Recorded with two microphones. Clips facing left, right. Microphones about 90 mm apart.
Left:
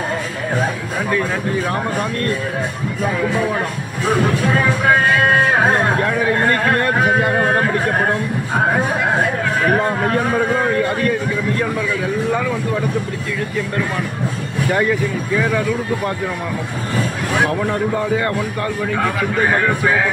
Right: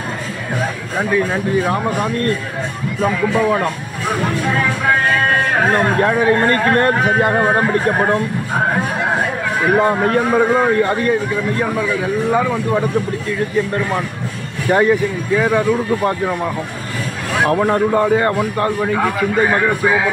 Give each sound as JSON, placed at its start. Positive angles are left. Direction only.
{"t": 4.6, "sound": "music", "side_deg": 5}
{"t": 7.3, "sound": "speech", "side_deg": -10}
{"t": 12.3, "sound": "speech", "side_deg": -20}
{"t": 14.7, "sound": "speech", "side_deg": -25}
{"t": 17.5, "sound": "speech", "side_deg": -40}